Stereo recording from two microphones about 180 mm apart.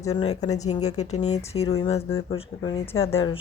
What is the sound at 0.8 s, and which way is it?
Speech, 40° left (ahead or behind).